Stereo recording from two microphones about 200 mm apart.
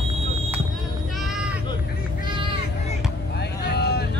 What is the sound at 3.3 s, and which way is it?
Vehicle, 55° left (ahead or behind).